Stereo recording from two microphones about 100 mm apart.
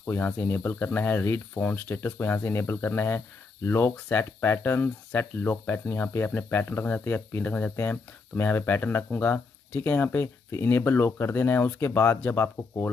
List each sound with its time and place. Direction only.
0.0 s speech: 20° left (ahead or behind)